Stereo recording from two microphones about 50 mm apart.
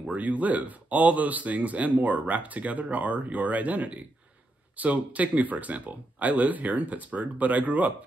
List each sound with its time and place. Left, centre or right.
0.1 s speech: right